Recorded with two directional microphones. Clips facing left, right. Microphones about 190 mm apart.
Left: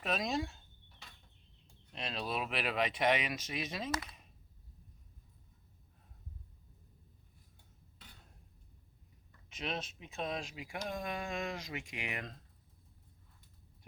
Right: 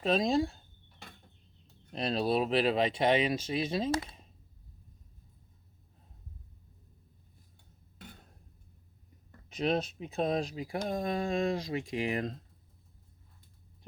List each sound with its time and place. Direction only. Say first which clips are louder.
0.0 s speech: right 8 dB; 30° right (ahead or behind)
1.9 s speech: right 10 dB; 35° right (ahead or behind)
7.9 s a sound: right 11 dB; 50° right (ahead or behind)
9.5 s speech: right 10 dB; 35° right (ahead or behind)